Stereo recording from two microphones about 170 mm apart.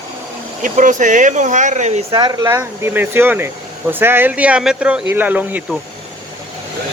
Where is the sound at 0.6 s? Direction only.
50° right (ahead or behind).